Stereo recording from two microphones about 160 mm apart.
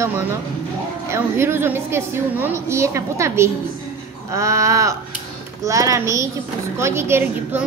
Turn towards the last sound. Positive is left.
turn(degrees=-15)  # may be behind; listen again after turning